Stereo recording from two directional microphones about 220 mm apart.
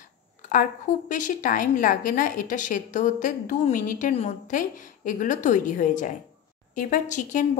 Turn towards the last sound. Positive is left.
turn(degrees=35)  # may be behind; listen again after turning